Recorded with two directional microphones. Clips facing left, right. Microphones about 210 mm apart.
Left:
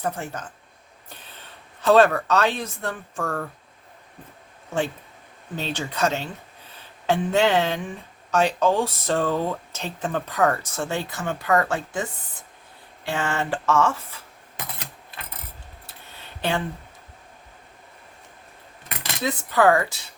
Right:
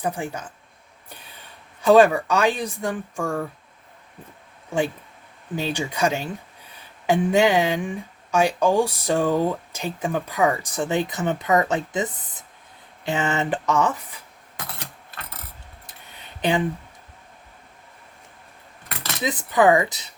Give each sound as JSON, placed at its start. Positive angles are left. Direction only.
{"t": 0.0, "sound": "speech", "side_deg": -15}
{"t": 1.1, "sound": "a sound", "side_deg": -10}
{"t": 1.8, "sound": "speech", "side_deg": -10}
{"t": 5.5, "sound": "speech", "side_deg": -10}
{"t": 13.1, "sound": "speech", "side_deg": -20}
{"t": 15.9, "sound": "a sound", "side_deg": -15}
{"t": 19.2, "sound": "speech", "side_deg": -15}